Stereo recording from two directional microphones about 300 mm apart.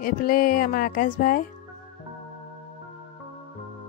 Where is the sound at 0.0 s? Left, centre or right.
Left.